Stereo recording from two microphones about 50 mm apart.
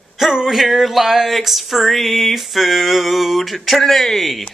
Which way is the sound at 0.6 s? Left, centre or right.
Centre.